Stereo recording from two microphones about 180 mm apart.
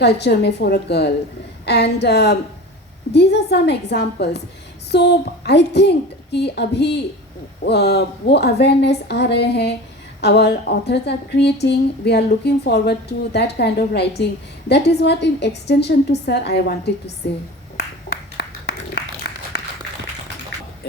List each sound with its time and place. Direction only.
0.0 s a woman's voice: 65° left (ahead or behind)
18.3 s a sound: 65° left (ahead or behind)
19.3 s applause: 75° left (ahead or behind)